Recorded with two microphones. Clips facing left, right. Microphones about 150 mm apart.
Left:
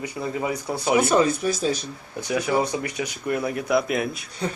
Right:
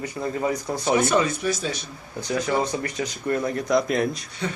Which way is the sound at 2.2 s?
10° left (ahead or behind).